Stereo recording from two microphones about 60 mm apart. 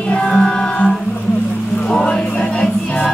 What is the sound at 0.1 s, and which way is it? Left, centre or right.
Music, centre.